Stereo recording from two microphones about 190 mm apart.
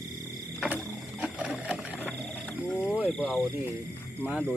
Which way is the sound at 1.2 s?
Centre (ahead or behind).